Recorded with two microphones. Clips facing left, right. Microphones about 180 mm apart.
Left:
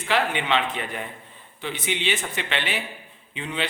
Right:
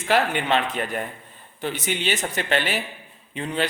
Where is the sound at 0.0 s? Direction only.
45° right (ahead or behind).